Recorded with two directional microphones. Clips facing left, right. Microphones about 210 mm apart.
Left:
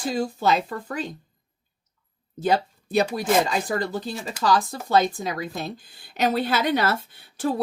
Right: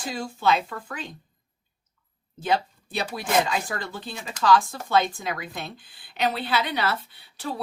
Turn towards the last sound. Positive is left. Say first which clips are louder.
# left 7 dB
turn(degrees=50)  # may be behind; listen again after turning